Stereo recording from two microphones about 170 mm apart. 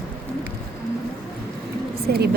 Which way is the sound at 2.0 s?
70° right (ahead or behind).